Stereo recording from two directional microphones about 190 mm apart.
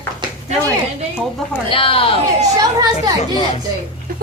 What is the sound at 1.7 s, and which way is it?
Speech, 30° left (ahead or behind).